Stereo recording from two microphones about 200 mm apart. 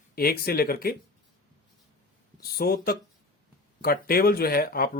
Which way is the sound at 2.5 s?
50° left (ahead or behind).